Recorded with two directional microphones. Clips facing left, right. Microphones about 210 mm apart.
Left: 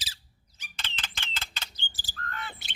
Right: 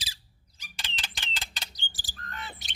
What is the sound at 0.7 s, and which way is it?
Bird, 15° right (ahead or behind).